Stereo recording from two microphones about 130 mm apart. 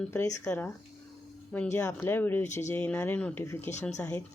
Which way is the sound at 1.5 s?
15° left (ahead or behind).